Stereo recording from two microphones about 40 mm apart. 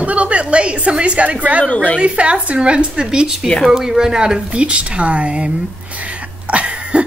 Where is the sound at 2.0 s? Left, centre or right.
Right.